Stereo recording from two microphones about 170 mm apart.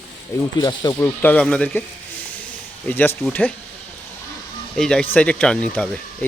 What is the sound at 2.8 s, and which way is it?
Speech, 10° left (ahead or behind).